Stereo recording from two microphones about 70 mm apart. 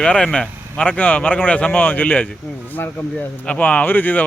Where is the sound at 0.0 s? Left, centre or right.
Centre.